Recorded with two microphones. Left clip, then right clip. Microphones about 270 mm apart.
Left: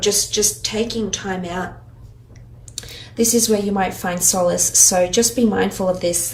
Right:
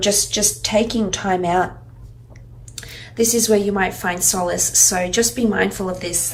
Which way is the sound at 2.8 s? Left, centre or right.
Centre.